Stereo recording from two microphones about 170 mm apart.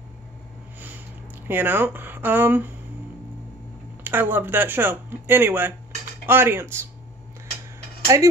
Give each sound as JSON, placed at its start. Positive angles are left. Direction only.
{"t": 0.7, "sound": "a sound", "side_deg": -10}
{"t": 1.5, "sound": "speech", "side_deg": -10}
{"t": 4.0, "sound": "speech", "side_deg": -10}
{"t": 8.1, "sound": "speech", "side_deg": -20}